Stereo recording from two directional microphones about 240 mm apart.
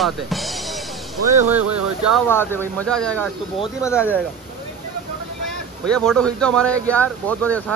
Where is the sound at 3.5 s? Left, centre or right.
Centre.